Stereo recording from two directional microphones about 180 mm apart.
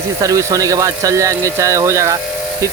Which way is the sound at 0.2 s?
20° right (ahead or behind).